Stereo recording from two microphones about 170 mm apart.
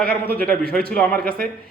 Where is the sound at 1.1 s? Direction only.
60° right (ahead or behind).